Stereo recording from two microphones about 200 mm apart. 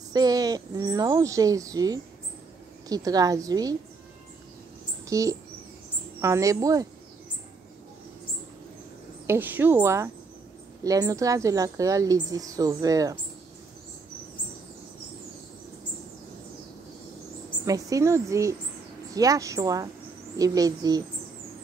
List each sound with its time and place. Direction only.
0.1 s speech: 20° right (ahead or behind)
5.0 s a sound: 15° right (ahead or behind)
6.2 s speech: 15° right (ahead or behind)
9.3 s speech: 10° right (ahead or behind)
17.6 s speech: 15° right (ahead or behind)